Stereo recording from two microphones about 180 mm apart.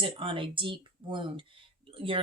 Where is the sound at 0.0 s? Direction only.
30° right (ahead or behind).